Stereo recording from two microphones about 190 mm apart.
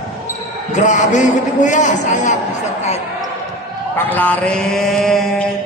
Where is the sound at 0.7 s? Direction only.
40° left (ahead or behind).